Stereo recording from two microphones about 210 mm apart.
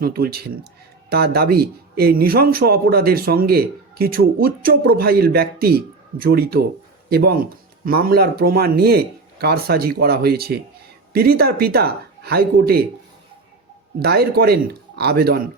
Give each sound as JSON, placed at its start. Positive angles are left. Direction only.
{"t": 0.0, "sound": "speech", "side_deg": -45}
{"t": 14.0, "sound": "speech", "side_deg": -50}